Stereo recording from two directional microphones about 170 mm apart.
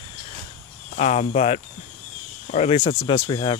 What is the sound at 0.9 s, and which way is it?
Speech, 40° left (ahead or behind).